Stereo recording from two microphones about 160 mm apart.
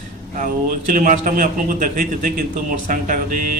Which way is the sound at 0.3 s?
60° right (ahead or behind).